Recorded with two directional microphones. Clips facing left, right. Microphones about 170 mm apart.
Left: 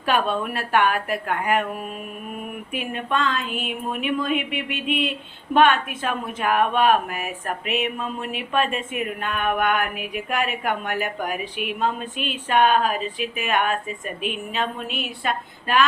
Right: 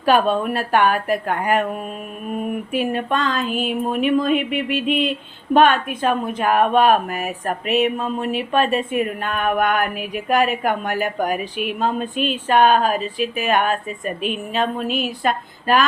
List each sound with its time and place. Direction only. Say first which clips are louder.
0.0 s speech: right 6 dB; 35° right (ahead or behind)
2.7 s speech: right 4 dB; 40° right (ahead or behind)